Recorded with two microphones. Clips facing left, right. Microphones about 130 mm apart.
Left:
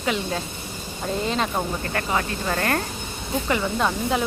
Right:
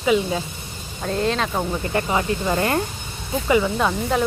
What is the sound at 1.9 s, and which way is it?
Speech, 15° right (ahead or behind).